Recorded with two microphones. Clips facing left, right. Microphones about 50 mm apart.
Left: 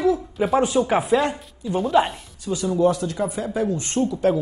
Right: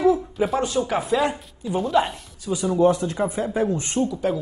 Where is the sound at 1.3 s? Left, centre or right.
Centre.